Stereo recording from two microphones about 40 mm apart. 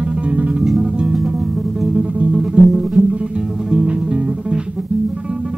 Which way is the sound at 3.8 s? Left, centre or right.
Right.